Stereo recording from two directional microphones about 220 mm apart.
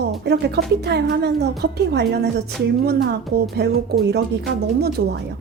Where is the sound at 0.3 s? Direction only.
50° right (ahead or behind).